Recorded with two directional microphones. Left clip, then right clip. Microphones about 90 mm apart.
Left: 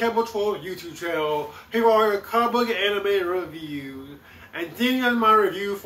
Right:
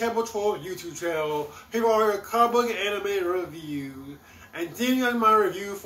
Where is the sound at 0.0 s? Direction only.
25° right (ahead or behind).